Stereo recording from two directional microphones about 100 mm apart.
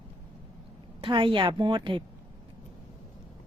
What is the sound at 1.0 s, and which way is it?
A woman's voice, 55° right (ahead or behind).